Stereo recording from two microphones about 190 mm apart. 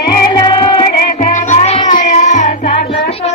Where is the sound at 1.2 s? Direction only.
40° left (ahead or behind).